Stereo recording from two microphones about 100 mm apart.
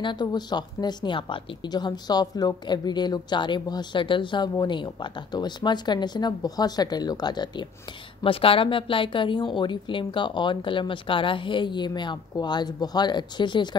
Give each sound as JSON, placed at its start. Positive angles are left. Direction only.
{"t": 0.0, "sound": "a woman's voice", "side_deg": 45}
{"t": 8.2, "sound": "a woman's voice", "side_deg": 65}